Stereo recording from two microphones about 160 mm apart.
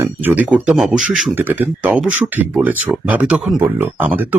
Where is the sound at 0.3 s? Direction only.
5° right (ahead or behind).